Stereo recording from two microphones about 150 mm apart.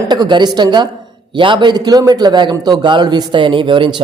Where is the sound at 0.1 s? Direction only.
30° right (ahead or behind).